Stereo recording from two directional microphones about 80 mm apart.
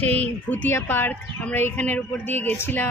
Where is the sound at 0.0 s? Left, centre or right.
Centre.